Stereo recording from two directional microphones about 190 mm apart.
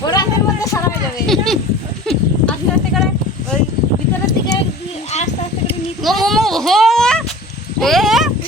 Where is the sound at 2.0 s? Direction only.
Centre (ahead or behind).